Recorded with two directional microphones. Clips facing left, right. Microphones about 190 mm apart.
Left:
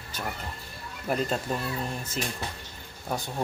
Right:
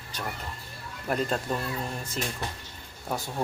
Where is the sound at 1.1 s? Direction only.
5° left (ahead or behind).